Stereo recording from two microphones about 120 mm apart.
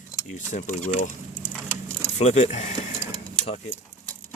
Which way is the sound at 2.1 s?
65° left (ahead or behind).